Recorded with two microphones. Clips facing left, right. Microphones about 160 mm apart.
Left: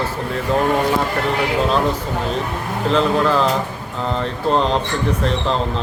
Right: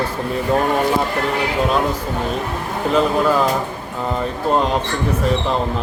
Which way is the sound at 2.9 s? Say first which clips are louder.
Even; 10° right (ahead or behind).